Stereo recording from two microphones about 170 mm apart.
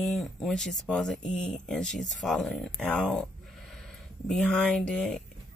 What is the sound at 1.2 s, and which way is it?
Speech, 45° left (ahead or behind).